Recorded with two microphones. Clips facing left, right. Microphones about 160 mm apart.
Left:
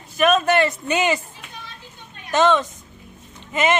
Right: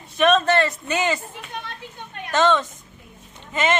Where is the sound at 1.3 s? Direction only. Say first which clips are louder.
Right 6 dB; 55° right (ahead or behind).